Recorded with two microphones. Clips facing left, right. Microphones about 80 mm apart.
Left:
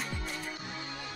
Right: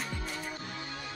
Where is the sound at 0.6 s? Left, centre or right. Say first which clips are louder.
Even; centre.